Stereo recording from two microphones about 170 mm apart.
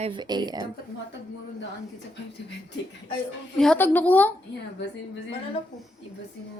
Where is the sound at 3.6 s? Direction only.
10° left (ahead or behind).